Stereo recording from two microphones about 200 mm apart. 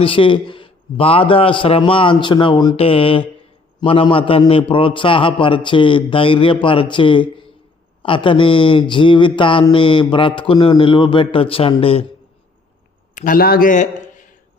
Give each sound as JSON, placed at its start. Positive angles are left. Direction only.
{"t": 0.0, "sound": "speech", "side_deg": 25}
{"t": 13.1, "sound": "a man's voice", "side_deg": 45}